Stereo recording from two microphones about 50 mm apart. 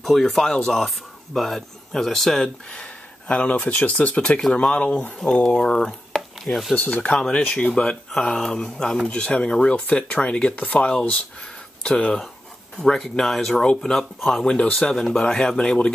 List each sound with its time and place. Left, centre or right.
0.0 s speech: centre
0.8 s speech: centre
2.7 s speech: left; by 6.6 s centre
6.8 s speech: left
7.2 s speech: centre